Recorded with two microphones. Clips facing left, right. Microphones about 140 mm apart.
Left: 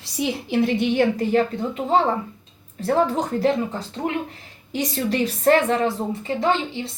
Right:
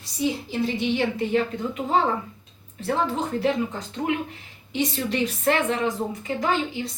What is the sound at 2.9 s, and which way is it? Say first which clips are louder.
A woman's voice: left 4 dB; 40° left (ahead or behind).